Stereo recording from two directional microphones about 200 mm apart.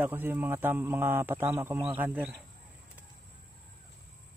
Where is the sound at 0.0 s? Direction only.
10° right (ahead or behind).